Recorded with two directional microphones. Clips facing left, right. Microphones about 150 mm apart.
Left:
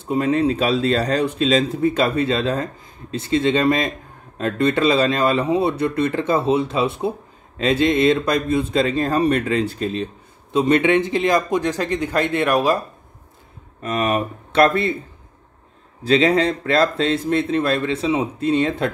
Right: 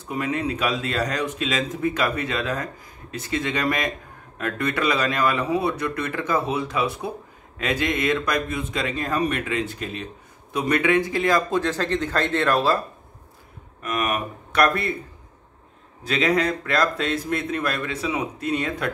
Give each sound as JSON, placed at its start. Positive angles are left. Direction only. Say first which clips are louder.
{"t": 0.0, "sound": "speech", "louder": "left 8 dB", "side_deg": 30}
{"t": 13.8, "sound": "speech", "louder": "left 5 dB", "side_deg": 30}
{"t": 16.0, "sound": "speech", "louder": "left 6 dB", "side_deg": 30}